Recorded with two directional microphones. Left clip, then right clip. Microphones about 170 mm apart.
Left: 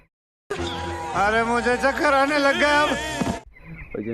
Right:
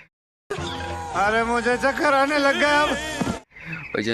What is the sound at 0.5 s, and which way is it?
Music, 15° right (ahead or behind).